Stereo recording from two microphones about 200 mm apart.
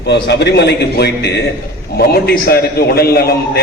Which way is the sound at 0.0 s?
55° left (ahead or behind).